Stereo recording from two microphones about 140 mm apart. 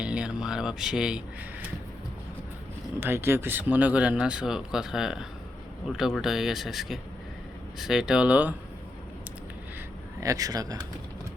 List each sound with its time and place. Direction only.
0.0 s speech: 5° right (ahead or behind)
3.0 s speech: 15° right (ahead or behind)
10.2 s speech: 25° right (ahead or behind)